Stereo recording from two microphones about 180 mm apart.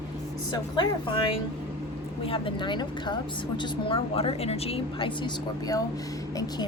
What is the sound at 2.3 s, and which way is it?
A woman's voice, 30° left (ahead or behind).